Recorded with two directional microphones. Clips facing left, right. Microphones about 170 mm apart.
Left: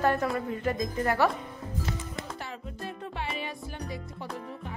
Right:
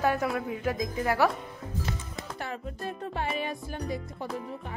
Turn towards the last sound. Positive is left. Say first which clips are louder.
# right 3 dB
turn(degrees=-45)  # may be behind; listen again after turning